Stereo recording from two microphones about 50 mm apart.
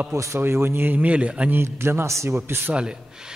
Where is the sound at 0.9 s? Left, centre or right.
Right.